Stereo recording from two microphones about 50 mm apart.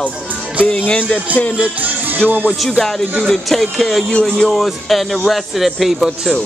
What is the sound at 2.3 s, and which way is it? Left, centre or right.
Speech, right.